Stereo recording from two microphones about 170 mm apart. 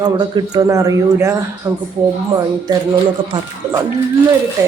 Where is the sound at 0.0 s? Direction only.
25° right (ahead or behind).